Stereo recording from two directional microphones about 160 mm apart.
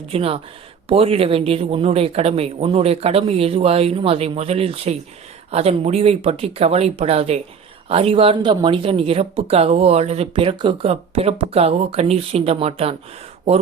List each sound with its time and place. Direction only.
0.1 s speech: 35° right (ahead or behind)